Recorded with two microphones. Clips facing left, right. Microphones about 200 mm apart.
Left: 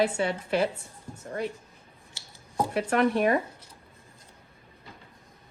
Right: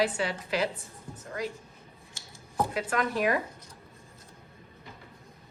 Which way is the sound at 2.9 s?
30° left (ahead or behind).